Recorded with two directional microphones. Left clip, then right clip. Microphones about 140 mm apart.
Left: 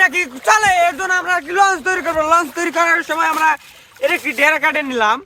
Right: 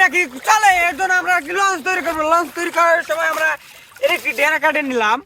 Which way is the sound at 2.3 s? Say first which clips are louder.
Left 1 dB; 85° left.